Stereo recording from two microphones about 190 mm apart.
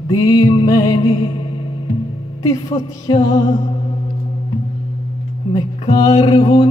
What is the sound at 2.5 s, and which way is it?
Music, 25° left (ahead or behind).